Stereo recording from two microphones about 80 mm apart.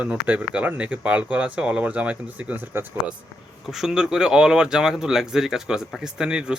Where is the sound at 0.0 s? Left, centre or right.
Centre.